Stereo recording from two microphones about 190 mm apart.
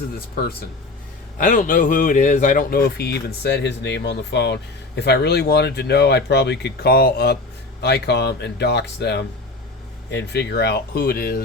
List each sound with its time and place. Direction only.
1.4 s speech: 45° left (ahead or behind)